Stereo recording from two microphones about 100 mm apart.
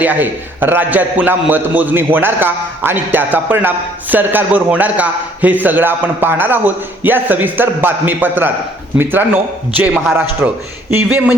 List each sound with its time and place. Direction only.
0.0 s a man's voice: 15° right (ahead or behind)